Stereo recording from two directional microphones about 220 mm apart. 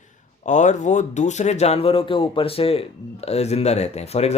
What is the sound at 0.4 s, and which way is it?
A man's voice, 35° left (ahead or behind).